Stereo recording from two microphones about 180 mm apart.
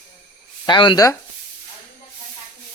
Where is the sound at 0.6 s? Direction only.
25° left (ahead or behind).